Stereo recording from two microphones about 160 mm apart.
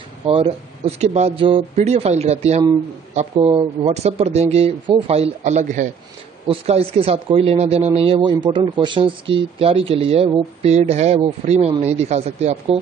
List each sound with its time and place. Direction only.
0.3 s speech: 40° right (ahead or behind)
6.4 s speech: 40° right (ahead or behind)